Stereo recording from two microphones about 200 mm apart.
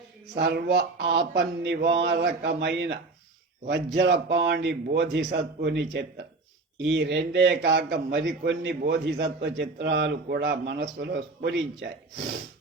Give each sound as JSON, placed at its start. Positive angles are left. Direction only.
{"t": 0.3, "sound": "a man's voice", "side_deg": -50}